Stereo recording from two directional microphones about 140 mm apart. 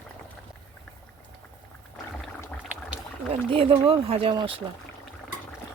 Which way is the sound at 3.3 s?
40° right (ahead or behind).